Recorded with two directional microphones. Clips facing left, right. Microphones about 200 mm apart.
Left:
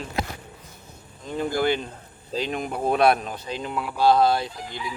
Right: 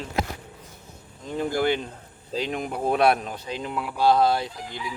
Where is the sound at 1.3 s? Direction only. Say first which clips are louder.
Even; 20° right (ahead or behind).